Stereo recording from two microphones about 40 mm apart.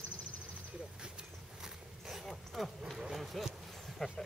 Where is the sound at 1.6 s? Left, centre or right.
Centre.